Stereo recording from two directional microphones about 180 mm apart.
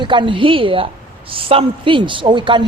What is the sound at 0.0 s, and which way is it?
A woman's voice, 25° right (ahead or behind).